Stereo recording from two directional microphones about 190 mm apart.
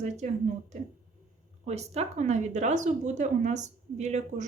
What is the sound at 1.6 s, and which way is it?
A woman's voice, 35° right (ahead or behind).